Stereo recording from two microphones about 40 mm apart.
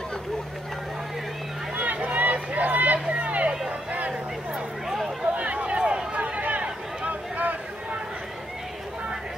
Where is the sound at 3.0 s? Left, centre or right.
Right.